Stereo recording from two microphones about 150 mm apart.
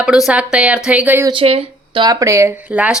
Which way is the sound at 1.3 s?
40° right (ahead or behind).